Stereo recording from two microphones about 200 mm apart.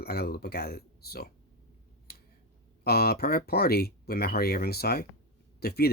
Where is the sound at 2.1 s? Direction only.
50° left (ahead or behind).